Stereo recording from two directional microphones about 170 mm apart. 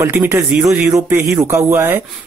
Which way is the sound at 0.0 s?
10° right (ahead or behind).